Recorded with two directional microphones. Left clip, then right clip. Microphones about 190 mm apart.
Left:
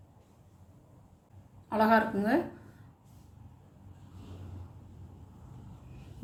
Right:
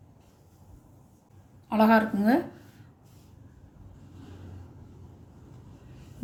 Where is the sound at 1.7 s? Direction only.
45° right (ahead or behind).